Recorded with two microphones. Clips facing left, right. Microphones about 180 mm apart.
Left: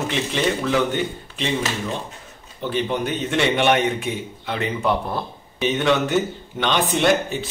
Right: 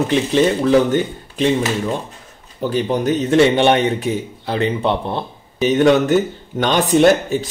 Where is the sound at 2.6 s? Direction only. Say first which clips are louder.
Right 5 dB; 40° right (ahead or behind).